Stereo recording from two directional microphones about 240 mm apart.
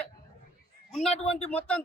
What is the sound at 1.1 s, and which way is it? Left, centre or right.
Speech, left.